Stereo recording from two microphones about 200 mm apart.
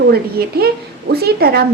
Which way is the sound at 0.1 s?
50° right (ahead or behind).